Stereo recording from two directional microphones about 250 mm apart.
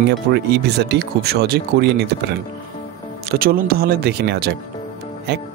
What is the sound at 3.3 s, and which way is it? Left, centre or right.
Speech, right.